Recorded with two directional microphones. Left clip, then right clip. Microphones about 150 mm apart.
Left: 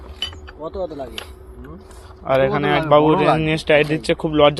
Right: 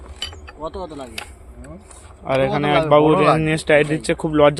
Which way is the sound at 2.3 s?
25° right (ahead or behind).